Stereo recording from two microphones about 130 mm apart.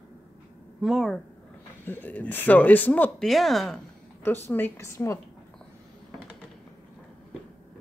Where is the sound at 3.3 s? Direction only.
Centre (ahead or behind).